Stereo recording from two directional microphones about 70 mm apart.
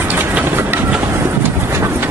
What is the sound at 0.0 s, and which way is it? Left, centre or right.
Train, right.